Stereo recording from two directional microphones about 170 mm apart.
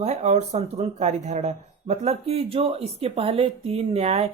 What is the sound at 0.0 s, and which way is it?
Speech, 40° right (ahead or behind).